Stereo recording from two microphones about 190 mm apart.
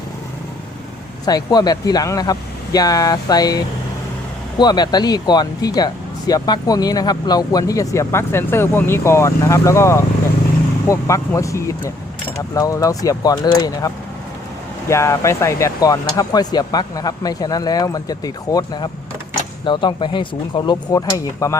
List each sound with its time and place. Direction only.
1.2 s speech: 20° left (ahead or behind)